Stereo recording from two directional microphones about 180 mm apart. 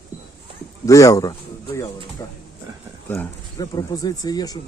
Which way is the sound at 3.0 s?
10° left (ahead or behind).